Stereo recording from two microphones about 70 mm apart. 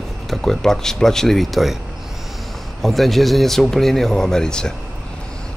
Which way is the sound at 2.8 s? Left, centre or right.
Centre.